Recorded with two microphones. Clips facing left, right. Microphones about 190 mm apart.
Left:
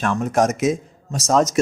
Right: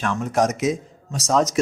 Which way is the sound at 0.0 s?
45° left (ahead or behind).